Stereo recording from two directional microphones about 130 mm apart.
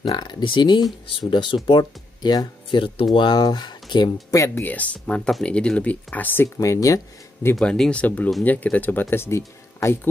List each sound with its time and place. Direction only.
0.0 s speech: 35° left (ahead or behind)
4.6 s speech: 10° left (ahead or behind)
7.5 s speech: 5° left (ahead or behind)